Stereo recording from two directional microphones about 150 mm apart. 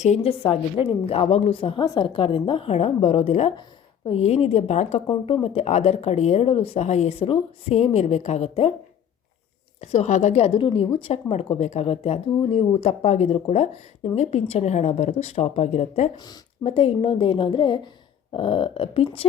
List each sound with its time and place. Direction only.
0.0 s a woman's voice: 45° left (ahead or behind)
5.0 s speech: 35° left (ahead or behind)
9.8 s speech: 45° left (ahead or behind)
16.1 s speech: 25° left (ahead or behind)
16.6 s a woman's voice: 40° left (ahead or behind)